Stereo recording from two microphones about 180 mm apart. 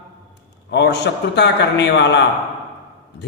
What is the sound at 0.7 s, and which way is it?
A man's voice, 75° left (ahead or behind).